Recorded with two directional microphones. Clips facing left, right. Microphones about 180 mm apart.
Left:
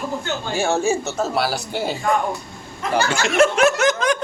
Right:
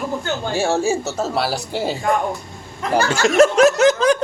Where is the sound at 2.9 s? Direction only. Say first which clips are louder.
Right 3 dB; 40° right (ahead or behind).